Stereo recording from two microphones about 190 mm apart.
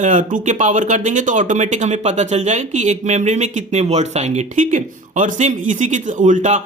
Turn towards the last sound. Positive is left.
turn(degrees=-40)  # may be behind; listen again after turning